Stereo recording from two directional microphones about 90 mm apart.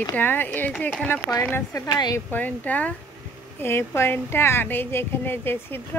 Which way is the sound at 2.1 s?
20° left (ahead or behind).